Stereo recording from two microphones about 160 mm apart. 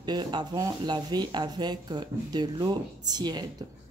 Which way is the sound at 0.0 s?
25° right (ahead or behind).